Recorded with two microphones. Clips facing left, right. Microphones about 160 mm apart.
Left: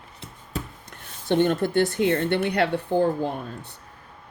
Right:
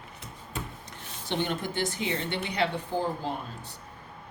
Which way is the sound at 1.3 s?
50° left (ahead or behind).